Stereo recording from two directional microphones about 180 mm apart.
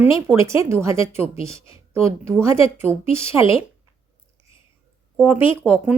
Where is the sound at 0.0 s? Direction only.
15° right (ahead or behind).